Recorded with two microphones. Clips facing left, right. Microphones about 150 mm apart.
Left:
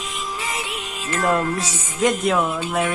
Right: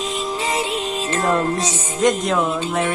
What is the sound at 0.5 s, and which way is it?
Music, 30° right (ahead or behind).